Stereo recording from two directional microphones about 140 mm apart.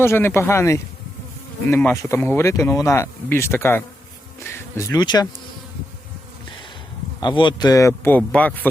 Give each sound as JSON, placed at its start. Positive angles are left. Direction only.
{"t": 0.0, "sound": "a man's voice", "side_deg": 15}
{"t": 7.2, "sound": "a man's voice", "side_deg": 35}